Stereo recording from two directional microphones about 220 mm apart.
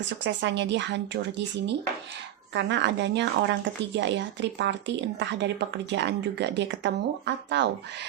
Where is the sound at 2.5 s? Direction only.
55° right (ahead or behind).